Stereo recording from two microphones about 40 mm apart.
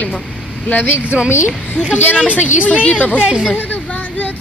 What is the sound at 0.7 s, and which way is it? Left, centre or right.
Speech, left.